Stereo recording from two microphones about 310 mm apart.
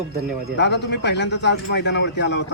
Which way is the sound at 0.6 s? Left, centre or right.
Left.